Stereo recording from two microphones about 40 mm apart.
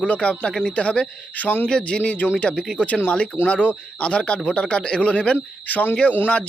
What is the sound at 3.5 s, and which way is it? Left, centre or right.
Speech, left.